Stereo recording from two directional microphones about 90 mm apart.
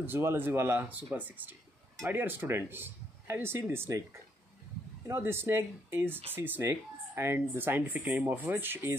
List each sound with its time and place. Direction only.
0.0 s speech: 25° right (ahead or behind)